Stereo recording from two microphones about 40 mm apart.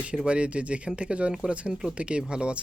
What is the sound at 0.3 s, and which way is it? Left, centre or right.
Speech, right.